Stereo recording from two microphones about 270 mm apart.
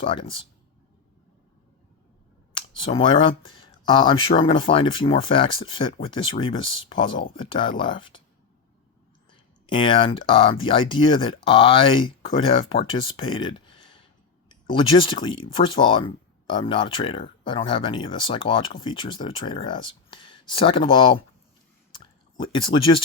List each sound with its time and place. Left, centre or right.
0.0 s speech: centre
2.6 s speech: centre
9.3 s speech: centre
21.9 s drip: centre